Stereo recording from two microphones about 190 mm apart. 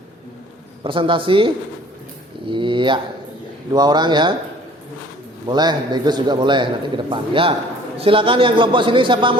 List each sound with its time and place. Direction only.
0.9 s a man's voice: 25° right (ahead or behind)
5.5 s a man's voice: 20° right (ahead or behind)